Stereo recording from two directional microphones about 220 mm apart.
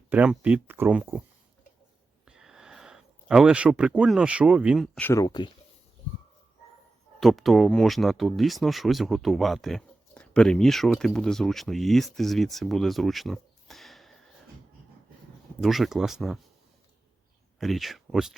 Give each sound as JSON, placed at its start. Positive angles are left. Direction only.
{"t": 0.1, "sound": "speech", "side_deg": -5}
{"t": 2.2, "sound": "a sound", "side_deg": -5}
{"t": 4.9, "sound": "speech", "side_deg": 10}
{"t": 7.2, "sound": "speech", "side_deg": 0}
{"t": 15.6, "sound": "speech", "side_deg": 0}
{"t": 17.6, "sound": "speech", "side_deg": 0}